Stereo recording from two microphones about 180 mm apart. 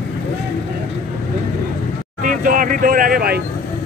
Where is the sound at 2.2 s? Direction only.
50° right (ahead or behind).